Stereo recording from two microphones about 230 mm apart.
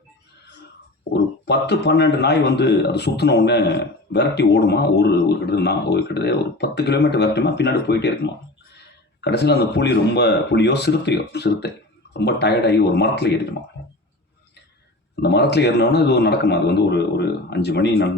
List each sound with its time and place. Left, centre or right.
1.1 s a man's voice: left
13.8 s drip: left
15.1 s a man's voice: left